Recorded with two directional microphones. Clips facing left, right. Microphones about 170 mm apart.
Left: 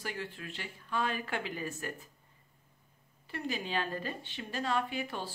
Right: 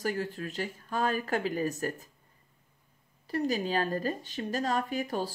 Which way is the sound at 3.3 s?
40° right (ahead or behind).